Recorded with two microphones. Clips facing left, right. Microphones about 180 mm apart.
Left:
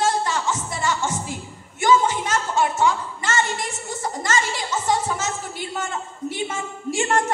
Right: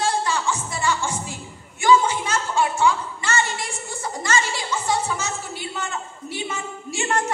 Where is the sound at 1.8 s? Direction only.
45° left (ahead or behind).